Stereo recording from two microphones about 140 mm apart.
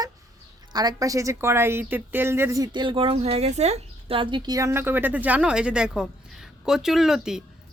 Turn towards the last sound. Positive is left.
turn(degrees=-5)  # may be behind; listen again after turning